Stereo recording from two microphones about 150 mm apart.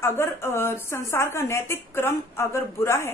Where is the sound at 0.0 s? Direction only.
15° left (ahead or behind).